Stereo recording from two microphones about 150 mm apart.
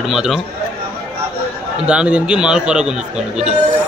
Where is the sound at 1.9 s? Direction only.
10° right (ahead or behind).